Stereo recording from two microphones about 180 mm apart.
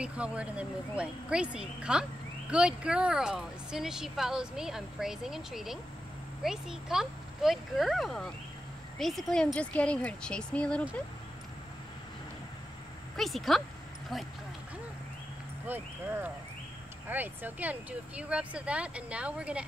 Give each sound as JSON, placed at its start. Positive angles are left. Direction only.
{"t": 0.0, "sound": "speech", "side_deg": -5}
{"t": 13.1, "sound": "speech", "side_deg": 0}
{"t": 15.6, "sound": "speech", "side_deg": -10}